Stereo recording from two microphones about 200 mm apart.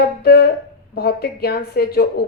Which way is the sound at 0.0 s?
50° left (ahead or behind).